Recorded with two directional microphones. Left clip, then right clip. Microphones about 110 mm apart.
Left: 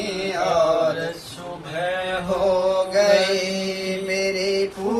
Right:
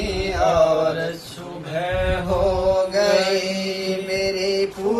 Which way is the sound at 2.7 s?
20° left (ahead or behind).